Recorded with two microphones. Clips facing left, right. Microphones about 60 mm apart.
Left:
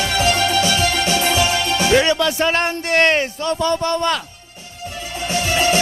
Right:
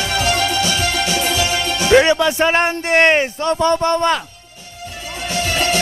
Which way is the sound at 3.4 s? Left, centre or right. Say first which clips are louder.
Right 4 dB; right.